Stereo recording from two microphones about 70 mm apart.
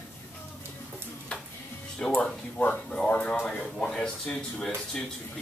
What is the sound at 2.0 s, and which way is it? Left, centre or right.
Speech, centre.